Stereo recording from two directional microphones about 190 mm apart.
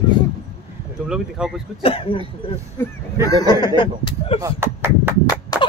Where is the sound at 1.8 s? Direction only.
30° left (ahead or behind).